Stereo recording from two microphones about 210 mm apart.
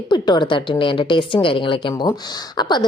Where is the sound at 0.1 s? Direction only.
20° left (ahead or behind).